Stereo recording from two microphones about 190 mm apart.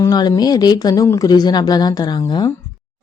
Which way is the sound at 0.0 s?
20° left (ahead or behind).